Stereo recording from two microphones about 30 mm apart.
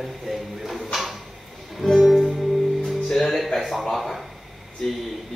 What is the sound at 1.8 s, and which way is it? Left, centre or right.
Music, centre.